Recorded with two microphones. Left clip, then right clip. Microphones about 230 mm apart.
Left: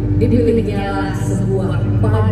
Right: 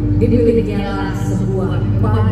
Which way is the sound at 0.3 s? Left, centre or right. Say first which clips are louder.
Right 1 dB; left.